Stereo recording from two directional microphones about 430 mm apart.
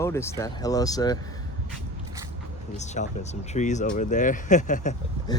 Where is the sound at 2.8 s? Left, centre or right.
Centre.